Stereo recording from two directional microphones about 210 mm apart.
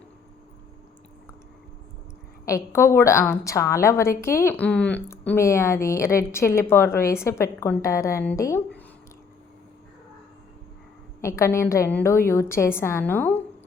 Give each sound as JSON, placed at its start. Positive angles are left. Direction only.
{"t": 2.5, "sound": "a woman's voice", "side_deg": 15}
{"t": 11.2, "sound": "a woman's voice", "side_deg": 15}